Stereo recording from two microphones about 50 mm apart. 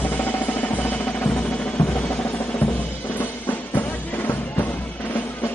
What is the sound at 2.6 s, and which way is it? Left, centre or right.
Drum, left.